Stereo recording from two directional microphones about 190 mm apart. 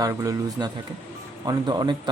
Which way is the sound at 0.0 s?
15° right (ahead or behind).